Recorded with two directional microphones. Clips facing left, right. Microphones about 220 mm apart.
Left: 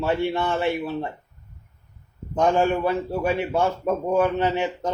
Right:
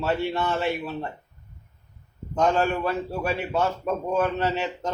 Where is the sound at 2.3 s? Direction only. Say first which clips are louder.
Left 2 dB; 15° left (ahead or behind).